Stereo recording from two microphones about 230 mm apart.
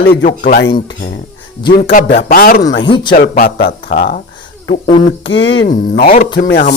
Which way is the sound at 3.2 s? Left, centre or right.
Left.